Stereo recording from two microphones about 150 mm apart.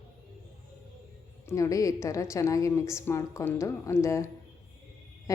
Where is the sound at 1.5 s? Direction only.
20° left (ahead or behind).